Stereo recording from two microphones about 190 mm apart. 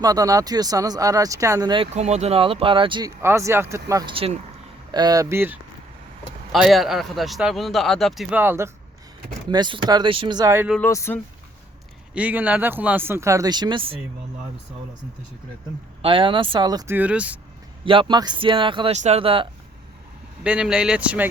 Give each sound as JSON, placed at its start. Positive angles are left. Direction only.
{"t": 0.0, "sound": "speech", "side_deg": -20}
{"t": 1.9, "sound": "speech", "side_deg": -35}
{"t": 3.2, "sound": "speech", "side_deg": -15}
{"t": 4.1, "sound": "speech", "side_deg": -30}
{"t": 6.5, "sound": "a man's voice", "side_deg": 0}
{"t": 9.5, "sound": "speech", "side_deg": -25}
{"t": 10.8, "sound": "speech", "side_deg": 15}
{"t": 12.1, "sound": "speech", "side_deg": -10}
{"t": 16.0, "sound": "speech", "side_deg": -30}
{"t": 17.8, "sound": "speech", "side_deg": -25}
{"t": 20.4, "sound": "a man's voice", "side_deg": -5}